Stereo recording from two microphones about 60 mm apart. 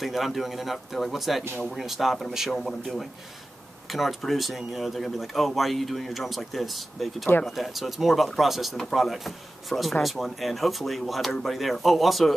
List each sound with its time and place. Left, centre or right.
0.0 s speech: centre